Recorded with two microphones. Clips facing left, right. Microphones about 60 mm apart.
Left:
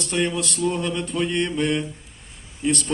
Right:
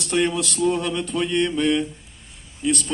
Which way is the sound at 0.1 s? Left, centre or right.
Centre.